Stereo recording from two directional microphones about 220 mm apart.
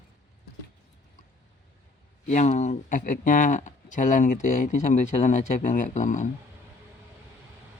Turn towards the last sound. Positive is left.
turn(degrees=35)  # may be behind; listen again after turning